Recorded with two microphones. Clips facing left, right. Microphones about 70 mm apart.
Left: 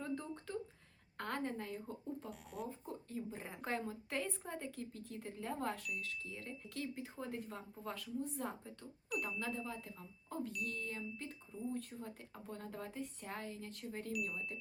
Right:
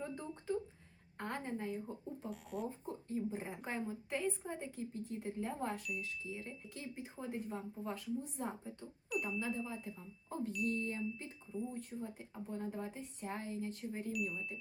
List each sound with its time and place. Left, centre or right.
0.0 s a sound: centre
1.2 s speech: centre
2.3 s speech: centre
2.6 s speech: right
9.0 s speech: centre
10.8 s speech: centre
14.1 s speech: centre